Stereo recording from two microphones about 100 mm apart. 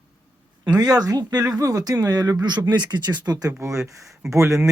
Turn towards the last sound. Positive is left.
turn(degrees=-30)  # may be behind; listen again after turning